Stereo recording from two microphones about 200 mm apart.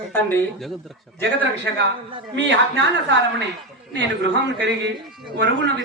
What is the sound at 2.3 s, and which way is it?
A man's voice, 60° right (ahead or behind).